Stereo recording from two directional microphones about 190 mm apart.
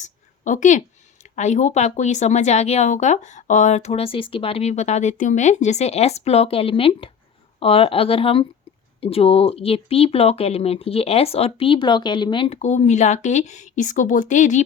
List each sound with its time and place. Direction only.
0.0 s a woman's voice: 40° left (ahead or behind)